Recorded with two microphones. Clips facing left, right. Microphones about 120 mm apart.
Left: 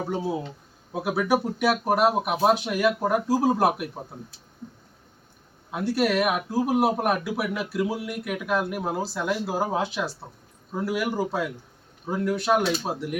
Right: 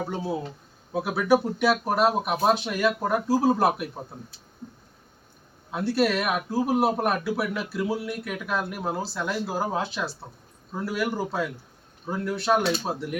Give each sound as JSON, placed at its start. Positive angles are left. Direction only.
{"t": 0.1, "sound": "speech", "side_deg": 10}
{"t": 5.7, "sound": "speech", "side_deg": 10}